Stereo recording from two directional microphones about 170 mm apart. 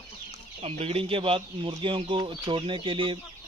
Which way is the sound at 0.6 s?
35° right (ahead or behind).